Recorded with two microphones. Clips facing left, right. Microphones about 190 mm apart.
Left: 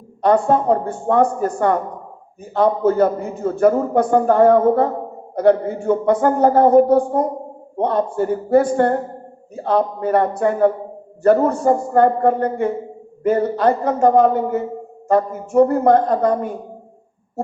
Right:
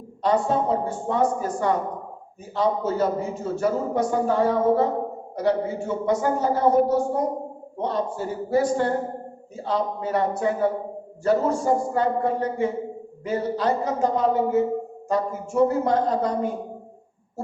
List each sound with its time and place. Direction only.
0.2 s a man's voice: 55° left (ahead or behind)